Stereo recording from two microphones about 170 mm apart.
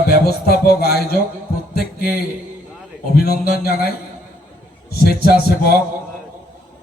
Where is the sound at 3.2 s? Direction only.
65° left (ahead or behind).